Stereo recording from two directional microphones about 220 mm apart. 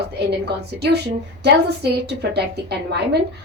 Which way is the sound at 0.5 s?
50° right (ahead or behind).